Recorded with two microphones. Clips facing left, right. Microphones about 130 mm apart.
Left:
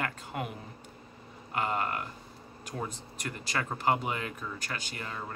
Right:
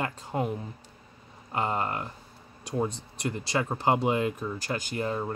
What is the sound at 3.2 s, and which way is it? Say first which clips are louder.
Speech: right 6 dB; 25° right (ahead or behind).